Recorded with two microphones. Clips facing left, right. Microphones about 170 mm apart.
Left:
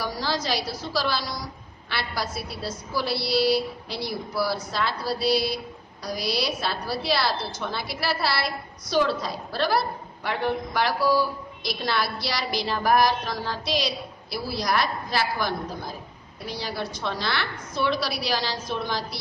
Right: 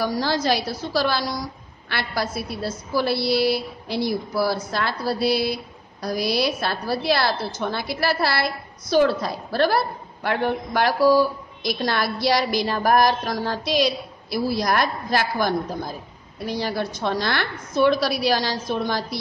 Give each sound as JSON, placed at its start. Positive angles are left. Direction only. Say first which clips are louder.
{"t": 0.0, "sound": "a woman's voice", "louder": "right 6 dB", "side_deg": -50}
{"t": 16.5, "sound": "a woman's voice", "louder": "right 5 dB", "side_deg": -50}